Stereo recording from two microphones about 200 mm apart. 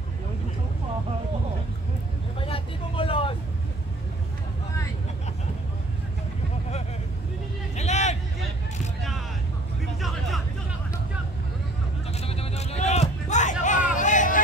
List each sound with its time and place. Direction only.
2.4 s vehicle: 25° left (ahead or behind)
7.7 s vehicle: 35° left (ahead or behind)
9.9 s vehicle: centre (ahead or behind)
12.1 s a sound: 30° left (ahead or behind)
13.9 s music: 40° left (ahead or behind)